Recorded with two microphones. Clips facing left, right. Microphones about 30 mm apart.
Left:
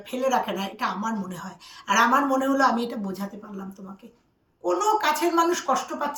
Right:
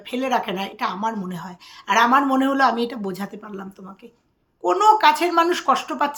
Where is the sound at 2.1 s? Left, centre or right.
Right.